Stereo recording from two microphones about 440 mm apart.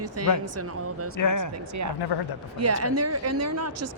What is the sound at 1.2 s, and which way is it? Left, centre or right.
Speech, left.